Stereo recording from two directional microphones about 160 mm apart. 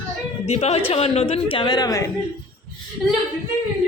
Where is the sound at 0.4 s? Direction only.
40° left (ahead or behind); by 2.0 s 20° left (ahead or behind).